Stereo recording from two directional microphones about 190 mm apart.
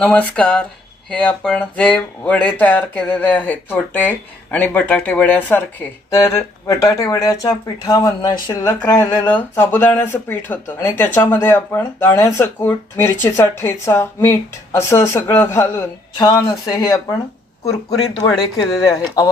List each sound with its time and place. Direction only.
0.0 s speech: 5° left (ahead or behind)
18.2 s speech: 25° left (ahead or behind)